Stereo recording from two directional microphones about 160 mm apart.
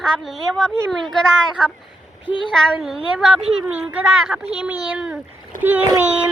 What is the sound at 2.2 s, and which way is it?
Speech, 30° left (ahead or behind).